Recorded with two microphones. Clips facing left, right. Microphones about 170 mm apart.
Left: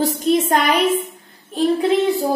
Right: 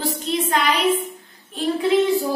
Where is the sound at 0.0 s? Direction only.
50° left (ahead or behind).